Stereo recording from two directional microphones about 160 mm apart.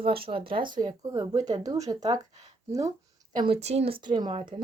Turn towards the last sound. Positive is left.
turn(degrees=-35)  # may be behind; listen again after turning